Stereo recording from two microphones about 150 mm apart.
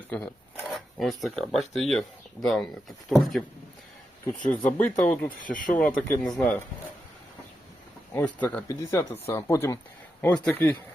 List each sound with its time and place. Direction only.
0.1 s speech: 5° left (ahead or behind)
4.4 s speech: 10° left (ahead or behind)
5.4 s speech: 65° left (ahead or behind)
6.2 s speech: 5° left (ahead or behind)
8.1 s speech: 10° left (ahead or behind)